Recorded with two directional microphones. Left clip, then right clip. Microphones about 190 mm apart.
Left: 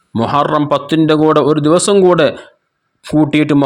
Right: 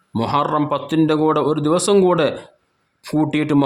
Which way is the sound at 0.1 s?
20° left (ahead or behind).